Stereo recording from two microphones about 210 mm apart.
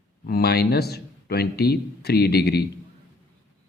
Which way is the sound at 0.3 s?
50° left (ahead or behind).